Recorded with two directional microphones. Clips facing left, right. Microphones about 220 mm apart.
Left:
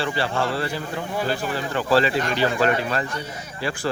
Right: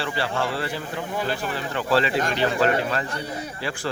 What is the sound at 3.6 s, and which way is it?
Speech, 40° left (ahead or behind).